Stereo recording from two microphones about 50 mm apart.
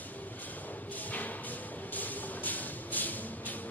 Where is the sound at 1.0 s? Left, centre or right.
Left.